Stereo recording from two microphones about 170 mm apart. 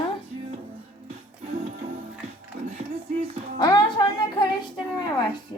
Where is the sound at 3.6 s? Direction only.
25° left (ahead or behind).